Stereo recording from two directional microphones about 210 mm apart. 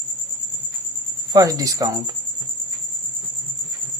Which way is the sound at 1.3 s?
15° right (ahead or behind).